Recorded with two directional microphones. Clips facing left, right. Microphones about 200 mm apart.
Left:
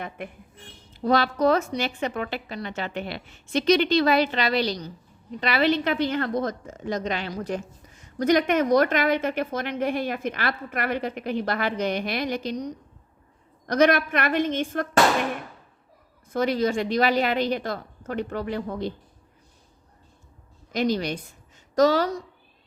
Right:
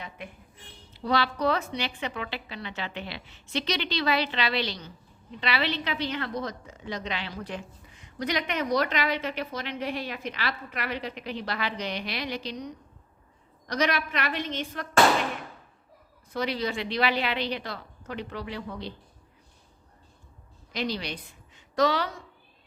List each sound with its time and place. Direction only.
0.9 s a woman's voice: 45° left (ahead or behind)
16.3 s a woman's voice: 45° left (ahead or behind)
20.7 s a woman's voice: 45° left (ahead or behind)